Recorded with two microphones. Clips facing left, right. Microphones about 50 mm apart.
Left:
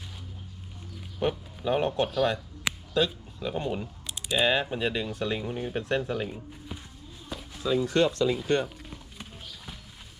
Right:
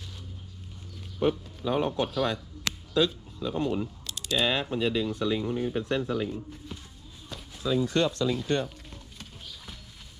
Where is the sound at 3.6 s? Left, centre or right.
Centre.